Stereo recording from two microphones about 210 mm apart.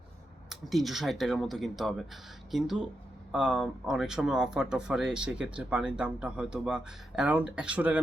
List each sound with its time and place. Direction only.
0.5 s speech: centre (ahead or behind)